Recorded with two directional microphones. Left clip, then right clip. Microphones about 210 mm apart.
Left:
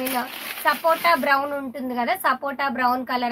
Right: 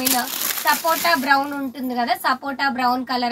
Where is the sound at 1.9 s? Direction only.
35° left (ahead or behind).